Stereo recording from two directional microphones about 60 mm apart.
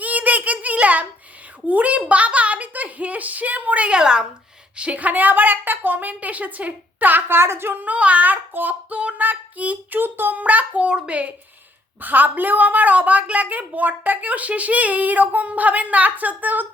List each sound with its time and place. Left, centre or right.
0.0 s child singing: right
1.6 s a woman's voice: right
4.8 s a woman's voice: right